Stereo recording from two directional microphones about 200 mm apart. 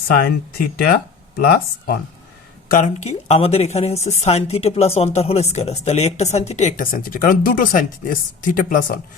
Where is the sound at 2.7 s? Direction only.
35° left (ahead or behind).